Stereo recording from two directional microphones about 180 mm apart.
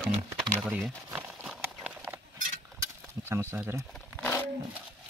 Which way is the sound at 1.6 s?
10° right (ahead or behind).